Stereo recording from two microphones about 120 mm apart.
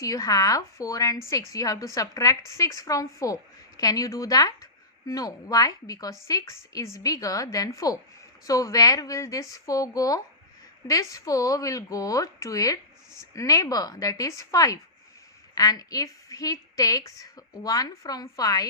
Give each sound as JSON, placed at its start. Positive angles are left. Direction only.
{"t": 0.0, "sound": "a woman's voice", "side_deg": 30}